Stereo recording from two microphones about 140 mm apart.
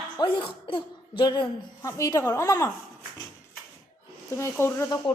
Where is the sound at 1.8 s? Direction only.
25° left (ahead or behind).